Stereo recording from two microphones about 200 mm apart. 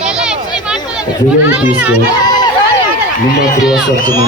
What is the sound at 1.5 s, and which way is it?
Speech, 5° right (ahead or behind).